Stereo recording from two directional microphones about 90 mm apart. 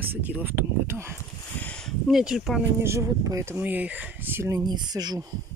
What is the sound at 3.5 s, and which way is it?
Speech, 20° right (ahead or behind).